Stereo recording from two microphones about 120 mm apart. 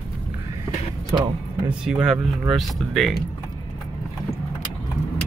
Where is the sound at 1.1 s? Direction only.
30° right (ahead or behind).